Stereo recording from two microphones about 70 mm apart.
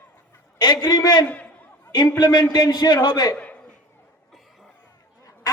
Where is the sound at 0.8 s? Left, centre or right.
Left.